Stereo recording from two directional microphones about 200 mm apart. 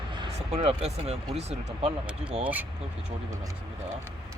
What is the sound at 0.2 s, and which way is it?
Speech, 25° right (ahead or behind).